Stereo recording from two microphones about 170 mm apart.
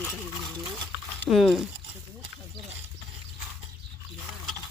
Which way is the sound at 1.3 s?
Centre (ahead or behind).